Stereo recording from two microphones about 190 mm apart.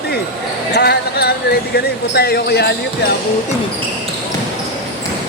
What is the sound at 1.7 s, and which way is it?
Speech, 55° left (ahead or behind).